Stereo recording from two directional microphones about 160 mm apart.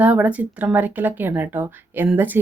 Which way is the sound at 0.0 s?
10° right (ahead or behind).